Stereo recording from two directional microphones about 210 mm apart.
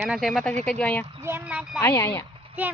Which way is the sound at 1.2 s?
10° right (ahead or behind).